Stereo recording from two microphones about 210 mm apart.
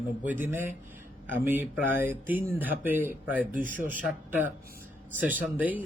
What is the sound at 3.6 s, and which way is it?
Speech, 40° right (ahead or behind).